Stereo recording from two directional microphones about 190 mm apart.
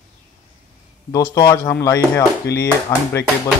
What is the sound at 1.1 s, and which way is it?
Speech, 20° left (ahead or behind).